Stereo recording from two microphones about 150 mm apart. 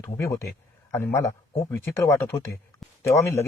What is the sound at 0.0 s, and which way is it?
A man's voice, 20° left (ahead or behind).